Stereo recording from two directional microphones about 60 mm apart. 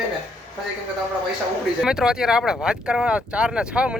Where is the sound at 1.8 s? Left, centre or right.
Centre.